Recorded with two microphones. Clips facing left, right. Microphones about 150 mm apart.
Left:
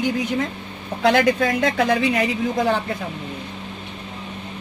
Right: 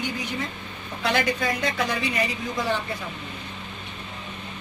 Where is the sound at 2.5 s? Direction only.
50° left (ahead or behind).